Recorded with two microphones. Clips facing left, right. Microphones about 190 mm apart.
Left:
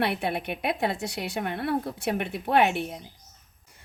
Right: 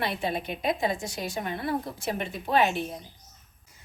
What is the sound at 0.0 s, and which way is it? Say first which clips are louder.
Speech: left 2 dB; 65° left (ahead or behind).